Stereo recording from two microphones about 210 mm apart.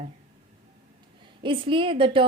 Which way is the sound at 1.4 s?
25° right (ahead or behind).